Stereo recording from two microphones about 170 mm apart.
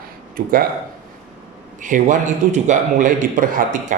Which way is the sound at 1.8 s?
50° right (ahead or behind).